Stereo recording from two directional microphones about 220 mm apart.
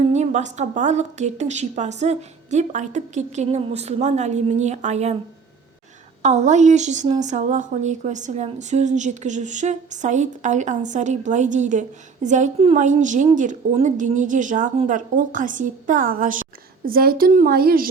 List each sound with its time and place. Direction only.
0.1 s speech: 30° right (ahead or behind)
6.2 s speech: 30° right (ahead or behind)